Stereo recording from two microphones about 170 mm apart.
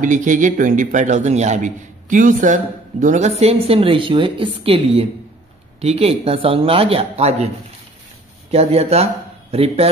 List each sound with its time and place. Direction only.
0.0 s a man's voice: 50° right (ahead or behind)
8.5 s speech: 35° right (ahead or behind)